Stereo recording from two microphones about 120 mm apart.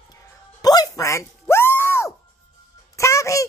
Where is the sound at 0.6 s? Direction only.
30° left (ahead or behind).